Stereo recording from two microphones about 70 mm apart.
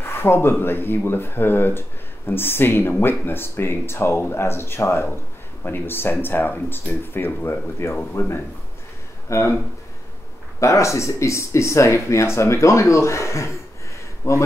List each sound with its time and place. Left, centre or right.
0.0 s speech: left
9.3 s speech: left
10.6 s speech: left